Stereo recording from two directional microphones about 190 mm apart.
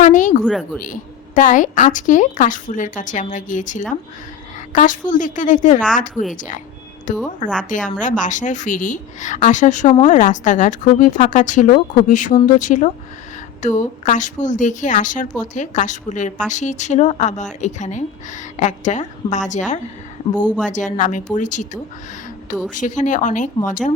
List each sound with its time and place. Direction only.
0.0 s a sound: 40° left (ahead or behind)
0.4 s speech: 5° right (ahead or behind)
1.4 s a woman's voice: 40° left (ahead or behind)